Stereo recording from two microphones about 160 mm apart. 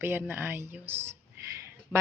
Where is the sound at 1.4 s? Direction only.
15° right (ahead or behind).